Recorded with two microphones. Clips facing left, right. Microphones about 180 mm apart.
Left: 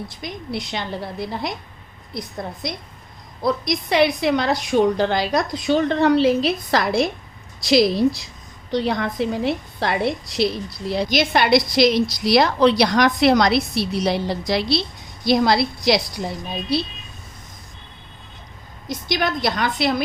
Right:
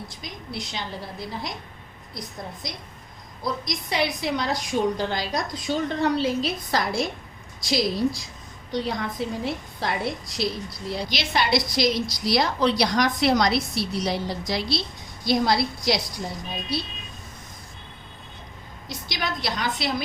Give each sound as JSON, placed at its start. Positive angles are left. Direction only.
{"t": 0.2, "sound": "a woman's voice", "side_deg": 60}
{"t": 3.4, "sound": "a woman's voice", "side_deg": 65}
{"t": 11.1, "sound": "a woman's voice", "side_deg": 55}
{"t": 18.9, "sound": "a woman's voice", "side_deg": 55}